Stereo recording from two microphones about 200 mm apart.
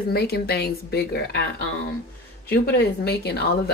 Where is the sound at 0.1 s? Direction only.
50° left (ahead or behind).